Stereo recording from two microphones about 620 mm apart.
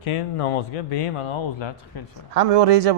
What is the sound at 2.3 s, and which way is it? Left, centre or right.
Speech, right.